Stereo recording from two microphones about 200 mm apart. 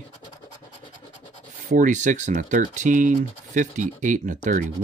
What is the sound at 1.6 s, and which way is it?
Speech, 40° right (ahead or behind).